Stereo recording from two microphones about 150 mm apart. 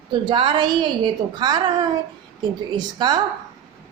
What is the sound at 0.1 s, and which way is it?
A woman's voice, 30° right (ahead or behind).